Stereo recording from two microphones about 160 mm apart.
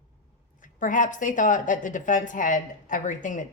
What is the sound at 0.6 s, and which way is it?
A woman's voice, 55° left (ahead or behind).